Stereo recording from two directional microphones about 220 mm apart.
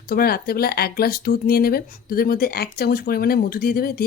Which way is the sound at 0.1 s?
45° left (ahead or behind).